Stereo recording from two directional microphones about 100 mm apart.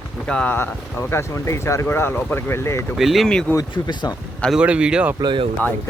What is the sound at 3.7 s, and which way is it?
Speech, 50° left (ahead or behind).